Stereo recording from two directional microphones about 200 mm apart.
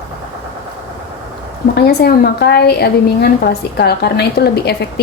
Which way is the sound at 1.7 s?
55° left (ahead or behind).